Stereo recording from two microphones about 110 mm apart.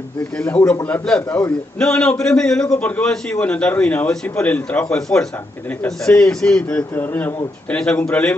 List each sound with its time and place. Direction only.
0.4 s a man's voice: 15° left (ahead or behind)